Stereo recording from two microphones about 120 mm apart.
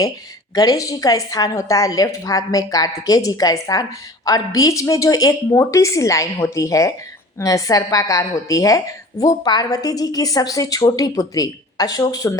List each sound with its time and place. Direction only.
0.5 s a woman's voice: 30° left (ahead or behind)